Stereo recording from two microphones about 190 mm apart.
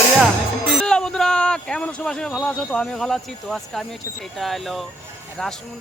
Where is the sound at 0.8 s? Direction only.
5° left (ahead or behind).